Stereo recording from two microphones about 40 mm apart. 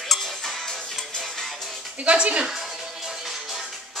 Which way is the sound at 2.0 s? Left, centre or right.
Right.